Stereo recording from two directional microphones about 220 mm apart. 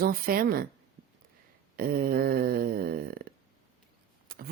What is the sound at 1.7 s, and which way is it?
Speech, 40° right (ahead or behind).